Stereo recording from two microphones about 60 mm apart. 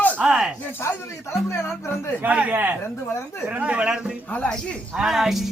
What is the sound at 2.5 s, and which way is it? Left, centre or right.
Speech, right.